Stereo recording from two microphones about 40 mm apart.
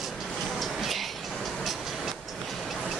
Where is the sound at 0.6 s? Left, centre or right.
Centre.